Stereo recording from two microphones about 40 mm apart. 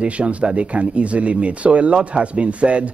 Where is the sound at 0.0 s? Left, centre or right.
Right.